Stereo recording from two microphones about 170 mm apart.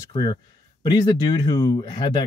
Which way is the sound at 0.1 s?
25° left (ahead or behind).